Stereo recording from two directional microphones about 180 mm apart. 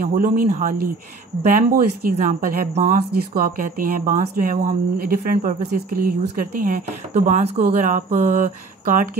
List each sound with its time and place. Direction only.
0.1 s a woman's voice: 50° right (ahead or behind)